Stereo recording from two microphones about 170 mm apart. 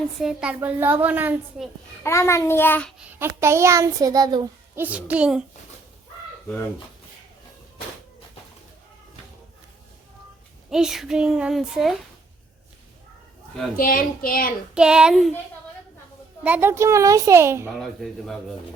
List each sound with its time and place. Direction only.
0.2 s a child's voice: 5° right (ahead or behind)
2.0 s a child's voice: 15° left (ahead or behind)
3.1 s a child's voice: 15° right (ahead or behind)
4.7 s a child's voice: 10° right (ahead or behind)
10.7 s a child's voice: 5° right (ahead or behind)
13.7 s a woman's voice: 55° left (ahead or behind)
14.8 s a child's voice: 5° right (ahead or behind)
16.4 s a child's voice: 10° right (ahead or behind)
17.7 s a child's voice: centre (ahead or behind)